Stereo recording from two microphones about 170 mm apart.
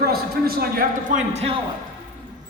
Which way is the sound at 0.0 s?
65° right (ahead or behind).